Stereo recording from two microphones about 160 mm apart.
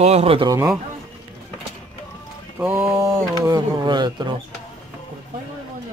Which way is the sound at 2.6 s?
10° right (ahead or behind).